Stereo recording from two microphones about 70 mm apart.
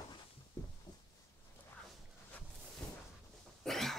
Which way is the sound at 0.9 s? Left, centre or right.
Left.